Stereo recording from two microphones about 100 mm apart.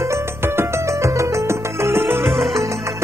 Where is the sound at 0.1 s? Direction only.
30° right (ahead or behind).